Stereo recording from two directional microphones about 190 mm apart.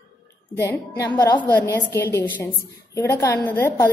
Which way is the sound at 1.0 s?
20° left (ahead or behind).